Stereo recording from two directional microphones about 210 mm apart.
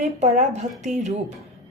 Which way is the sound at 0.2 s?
35° right (ahead or behind).